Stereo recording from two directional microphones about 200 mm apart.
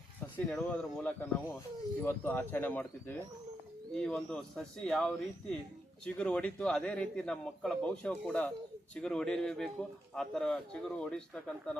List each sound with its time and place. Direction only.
0.3 s a man's voice: 5° left (ahead or behind)